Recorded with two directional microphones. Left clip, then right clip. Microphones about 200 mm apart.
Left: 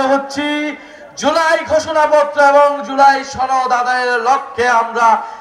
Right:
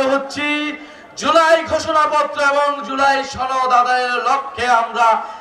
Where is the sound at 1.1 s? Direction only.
30° right (ahead or behind).